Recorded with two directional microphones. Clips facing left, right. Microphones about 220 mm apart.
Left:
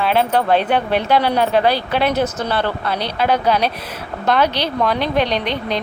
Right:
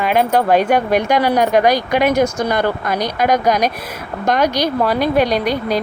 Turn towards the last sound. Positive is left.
turn(degrees=-10)  # may be behind; listen again after turning